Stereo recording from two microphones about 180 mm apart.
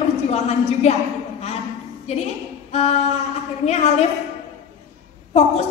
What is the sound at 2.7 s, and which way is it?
Speech, 35° left (ahead or behind).